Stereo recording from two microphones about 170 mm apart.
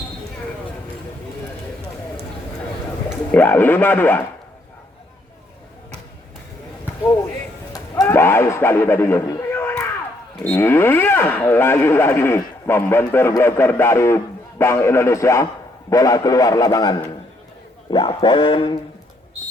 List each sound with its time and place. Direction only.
3.3 s speech: 10° left (ahead or behind)
7.7 s a sound: 15° left (ahead or behind)
10.4 s a man's voice: 10° left (ahead or behind); by 18.8 s 30° left (ahead or behind)